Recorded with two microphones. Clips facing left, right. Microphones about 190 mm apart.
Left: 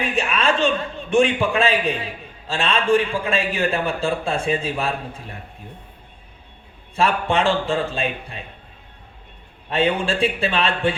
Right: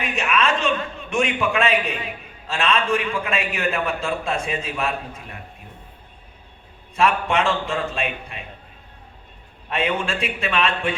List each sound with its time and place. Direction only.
0.0 s a man's voice: 30° left (ahead or behind)
6.9 s a man's voice: 30° left (ahead or behind)
9.6 s a man's voice: 30° left (ahead or behind)